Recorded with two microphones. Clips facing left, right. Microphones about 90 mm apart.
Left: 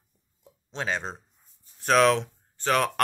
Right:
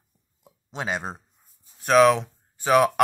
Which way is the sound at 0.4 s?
15° right (ahead or behind).